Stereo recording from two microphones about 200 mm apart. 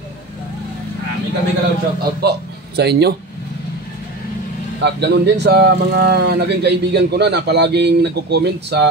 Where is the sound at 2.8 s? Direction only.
55° right (ahead or behind).